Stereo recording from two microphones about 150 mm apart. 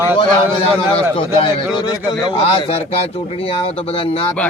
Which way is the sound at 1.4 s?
25° left (ahead or behind).